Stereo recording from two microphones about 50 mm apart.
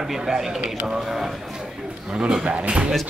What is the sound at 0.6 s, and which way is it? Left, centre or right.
Speech, right.